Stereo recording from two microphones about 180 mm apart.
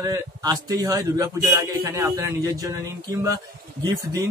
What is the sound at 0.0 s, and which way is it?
A man's voice, 20° right (ahead or behind).